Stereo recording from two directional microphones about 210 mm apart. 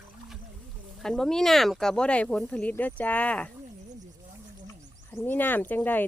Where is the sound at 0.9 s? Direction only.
Centre (ahead or behind).